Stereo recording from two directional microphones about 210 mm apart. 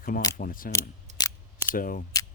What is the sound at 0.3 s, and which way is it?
Speech, 40° left (ahead or behind).